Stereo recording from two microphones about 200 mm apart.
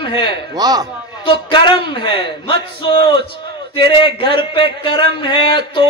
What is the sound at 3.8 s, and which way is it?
Speech, 25° left (ahead or behind).